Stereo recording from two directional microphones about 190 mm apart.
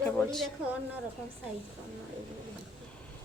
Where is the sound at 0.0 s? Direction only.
5° left (ahead or behind).